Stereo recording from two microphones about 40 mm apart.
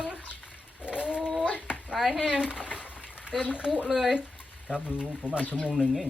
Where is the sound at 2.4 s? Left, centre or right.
Right.